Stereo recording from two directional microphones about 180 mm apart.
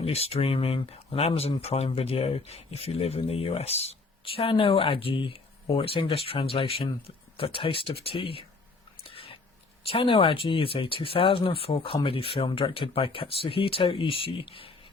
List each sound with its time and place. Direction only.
0.0 s speech: 35° left (ahead or behind)
9.0 s a sound: 30° left (ahead or behind)
9.9 s speech: 30° left (ahead or behind)